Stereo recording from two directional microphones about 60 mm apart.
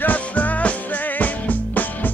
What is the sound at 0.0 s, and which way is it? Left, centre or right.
Music, left.